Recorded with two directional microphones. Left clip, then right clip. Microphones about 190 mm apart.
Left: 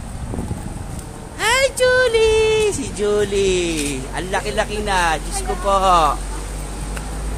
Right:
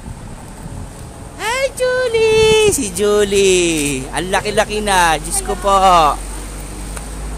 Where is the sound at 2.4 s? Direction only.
55° right (ahead or behind).